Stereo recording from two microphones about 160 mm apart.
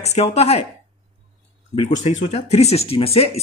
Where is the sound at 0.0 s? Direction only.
40° left (ahead or behind).